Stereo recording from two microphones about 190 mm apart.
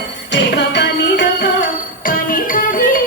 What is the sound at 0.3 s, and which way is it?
Music, 65° left (ahead or behind).